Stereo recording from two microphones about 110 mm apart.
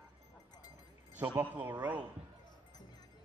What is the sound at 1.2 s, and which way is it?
Speech, 15° right (ahead or behind).